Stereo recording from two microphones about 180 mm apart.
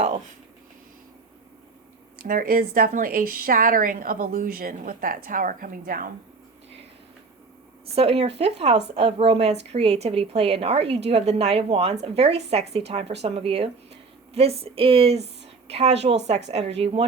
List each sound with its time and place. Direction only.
2.1 s speech: 55° right (ahead or behind)
7.9 s a woman's voice: 35° right (ahead or behind)